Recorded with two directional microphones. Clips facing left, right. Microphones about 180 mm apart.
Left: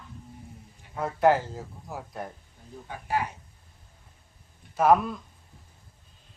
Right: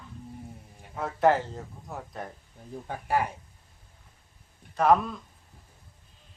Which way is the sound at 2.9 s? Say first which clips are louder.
Right 2 dB; 50° right (ahead or behind).